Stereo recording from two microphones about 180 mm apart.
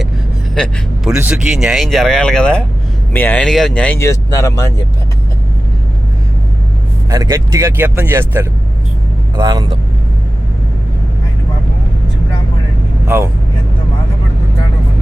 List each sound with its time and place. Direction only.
0.5 s speech: 5° left (ahead or behind)
1.1 s speech: 10° right (ahead or behind); by 4.7 s 15° left (ahead or behind)
7.1 s speech: 20° right (ahead or behind)
13.1 s speech: 15° right (ahead or behind)